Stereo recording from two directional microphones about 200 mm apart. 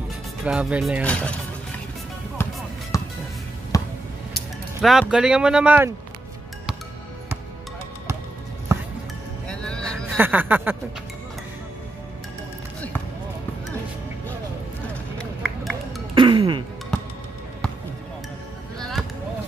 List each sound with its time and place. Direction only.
0.5 s speech: 5° right (ahead or behind)
2.4 s music: 10° left (ahead or behind)
3.7 s a sound: 15° left (ahead or behind)
4.8 s speech: centre (ahead or behind)
9.5 s vehicle: 5° left (ahead or behind)
10.1 s snicker: 10° right (ahead or behind)
15.1 s a sound: centre (ahead or behind)
16.2 s music: 25° right (ahead or behind)
18.8 s basketball bounce: centre (ahead or behind)